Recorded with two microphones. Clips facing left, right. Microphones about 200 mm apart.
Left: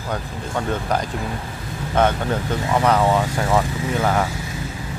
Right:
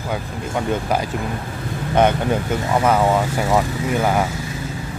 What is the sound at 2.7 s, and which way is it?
Speech, 10° right (ahead or behind).